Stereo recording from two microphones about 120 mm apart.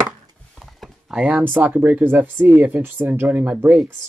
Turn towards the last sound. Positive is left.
turn(degrees=-15)  # may be behind; listen again after turning